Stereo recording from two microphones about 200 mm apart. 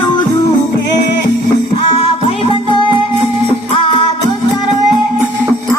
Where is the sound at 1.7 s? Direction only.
30° left (ahead or behind).